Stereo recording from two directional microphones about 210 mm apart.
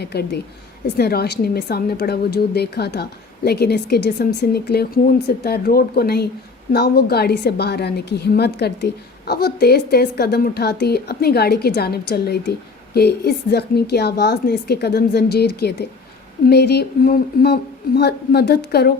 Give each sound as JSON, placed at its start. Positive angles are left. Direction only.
{"t": 0.0, "sound": "a woman's voice", "side_deg": 50}